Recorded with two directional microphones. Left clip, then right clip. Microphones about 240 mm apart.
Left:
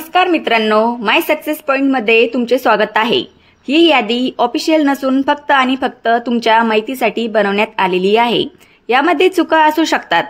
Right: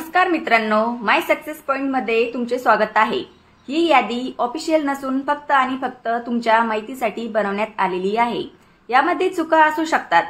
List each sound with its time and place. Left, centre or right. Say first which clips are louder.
0.1 s a woman's voice: left 4 dB; left